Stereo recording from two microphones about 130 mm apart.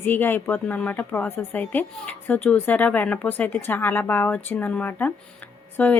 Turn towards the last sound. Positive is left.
turn(degrees=10)  # may be behind; listen again after turning